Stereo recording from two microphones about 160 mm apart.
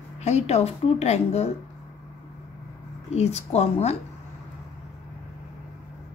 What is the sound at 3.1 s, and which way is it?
Speech, 45° left (ahead or behind).